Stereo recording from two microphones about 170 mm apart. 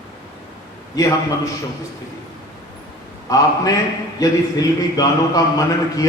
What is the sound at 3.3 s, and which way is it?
Speech, 20° left (ahead or behind).